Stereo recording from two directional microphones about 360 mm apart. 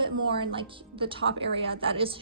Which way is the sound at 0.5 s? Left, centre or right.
Centre.